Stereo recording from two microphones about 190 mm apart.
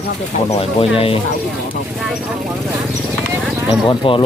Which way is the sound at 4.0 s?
25° left (ahead or behind).